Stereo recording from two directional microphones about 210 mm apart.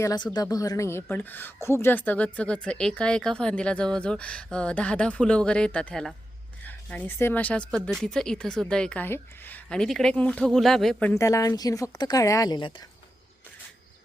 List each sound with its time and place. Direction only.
0.0 s a woman's voice: 20° left (ahead or behind); by 11.1 s centre (ahead or behind)
11.1 s speech: 15° left (ahead or behind)